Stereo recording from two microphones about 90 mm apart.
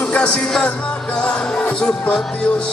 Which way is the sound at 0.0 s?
10° left (ahead or behind).